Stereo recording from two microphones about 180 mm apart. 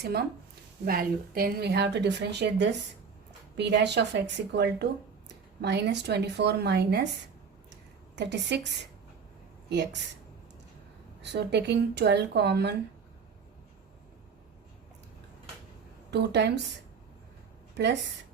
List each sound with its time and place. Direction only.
0.0 s speech: 60° right (ahead or behind)
7.7 s a sound: 75° right (ahead or behind)
9.6 s speech: 70° right (ahead or behind)
11.2 s speech: 70° right (ahead or behind)
16.1 s speech: 70° right (ahead or behind)
17.8 s speech: 70° right (ahead or behind)